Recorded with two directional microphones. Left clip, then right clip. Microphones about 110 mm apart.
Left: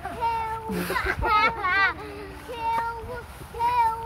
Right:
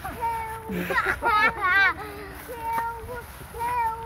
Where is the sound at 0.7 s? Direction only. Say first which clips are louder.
Even; centre (ahead or behind).